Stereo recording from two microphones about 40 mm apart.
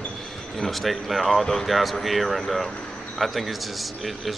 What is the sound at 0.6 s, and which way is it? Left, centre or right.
Speech, centre.